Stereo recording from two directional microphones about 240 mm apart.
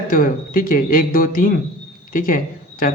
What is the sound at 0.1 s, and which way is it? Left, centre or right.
Speech, left.